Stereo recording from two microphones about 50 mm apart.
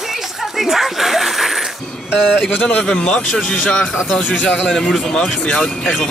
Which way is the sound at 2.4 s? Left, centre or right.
Left.